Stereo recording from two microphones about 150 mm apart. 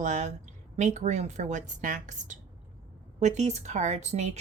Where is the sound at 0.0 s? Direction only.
55° right (ahead or behind).